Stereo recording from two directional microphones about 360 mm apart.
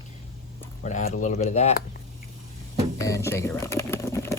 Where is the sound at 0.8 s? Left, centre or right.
Left.